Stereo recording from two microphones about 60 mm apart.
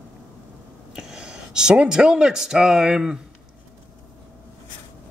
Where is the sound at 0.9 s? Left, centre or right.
Centre.